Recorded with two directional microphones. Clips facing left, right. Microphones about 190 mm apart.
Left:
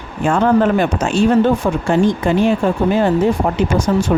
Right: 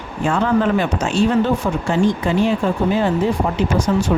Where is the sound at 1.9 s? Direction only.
55° left (ahead or behind).